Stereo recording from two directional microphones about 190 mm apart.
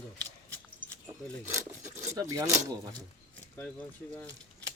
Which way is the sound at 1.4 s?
15° right (ahead or behind).